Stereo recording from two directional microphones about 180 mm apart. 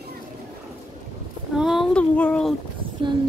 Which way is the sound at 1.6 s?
Centre (ahead or behind).